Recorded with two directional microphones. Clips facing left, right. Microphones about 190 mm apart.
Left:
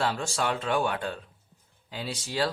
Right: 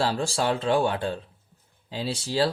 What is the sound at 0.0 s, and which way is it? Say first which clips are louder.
Speech: right 3 dB; 30° right (ahead or behind).